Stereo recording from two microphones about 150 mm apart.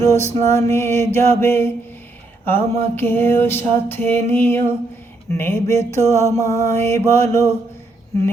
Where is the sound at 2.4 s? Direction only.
15° left (ahead or behind).